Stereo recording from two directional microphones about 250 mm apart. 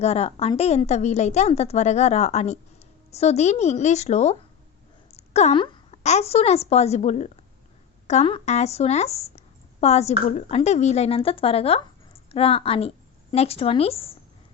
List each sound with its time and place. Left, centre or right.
0.0 s a woman's voice: left